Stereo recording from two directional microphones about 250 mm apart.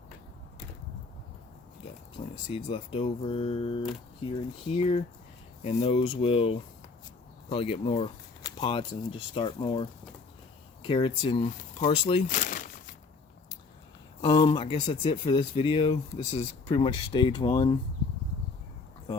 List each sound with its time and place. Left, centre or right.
2.5 s speech: left
10.8 s speech: left
14.2 s speech: left